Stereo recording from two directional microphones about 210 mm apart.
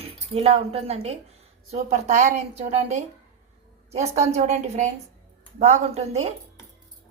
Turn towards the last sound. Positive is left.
turn(degrees=-30)  # may be behind; listen again after turning